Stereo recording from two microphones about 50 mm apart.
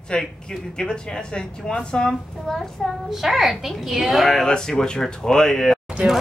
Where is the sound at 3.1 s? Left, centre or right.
Centre.